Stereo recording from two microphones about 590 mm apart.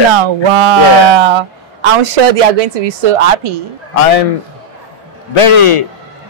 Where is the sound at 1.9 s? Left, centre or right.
Right.